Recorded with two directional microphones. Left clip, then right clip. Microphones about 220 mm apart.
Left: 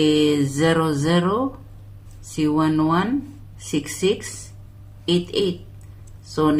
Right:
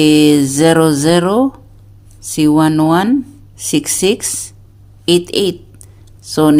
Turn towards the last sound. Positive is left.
turn(degrees=-45)  # may be behind; listen again after turning